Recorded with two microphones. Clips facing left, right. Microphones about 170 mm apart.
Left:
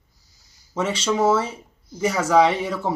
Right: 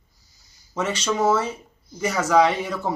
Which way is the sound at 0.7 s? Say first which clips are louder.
Left 2 dB; 5° left (ahead or behind).